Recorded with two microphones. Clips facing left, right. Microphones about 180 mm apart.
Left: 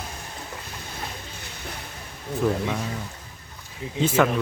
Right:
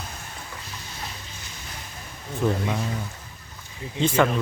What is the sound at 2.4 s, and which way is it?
Speech, 5° right (ahead or behind).